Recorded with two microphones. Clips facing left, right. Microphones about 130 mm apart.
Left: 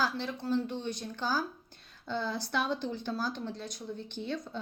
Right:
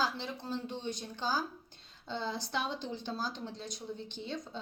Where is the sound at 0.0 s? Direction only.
20° right (ahead or behind).